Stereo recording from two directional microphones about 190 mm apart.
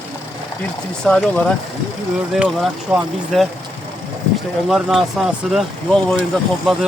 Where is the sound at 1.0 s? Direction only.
5° left (ahead or behind).